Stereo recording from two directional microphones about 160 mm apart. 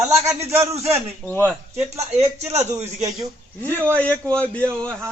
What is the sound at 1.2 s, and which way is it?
Speech, 10° left (ahead or behind).